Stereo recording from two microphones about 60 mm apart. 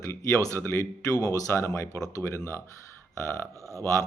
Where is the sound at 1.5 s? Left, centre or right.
Left.